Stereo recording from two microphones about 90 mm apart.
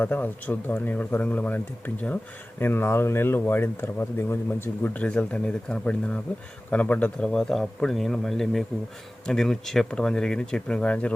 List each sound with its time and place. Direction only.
0.0 s speech: 20° left (ahead or behind)
7.3 s a man's voice: 5° left (ahead or behind)